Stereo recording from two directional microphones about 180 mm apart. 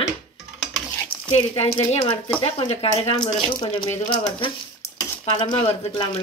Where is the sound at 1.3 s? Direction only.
30° left (ahead or behind).